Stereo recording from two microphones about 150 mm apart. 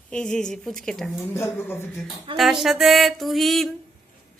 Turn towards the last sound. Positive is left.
turn(degrees=0)  # may be behind; listen again after turning